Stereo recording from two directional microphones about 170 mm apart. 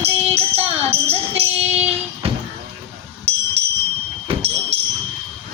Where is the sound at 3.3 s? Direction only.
35° right (ahead or behind).